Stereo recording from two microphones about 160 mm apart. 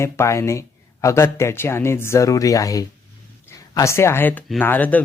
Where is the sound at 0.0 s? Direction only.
15° left (ahead or behind).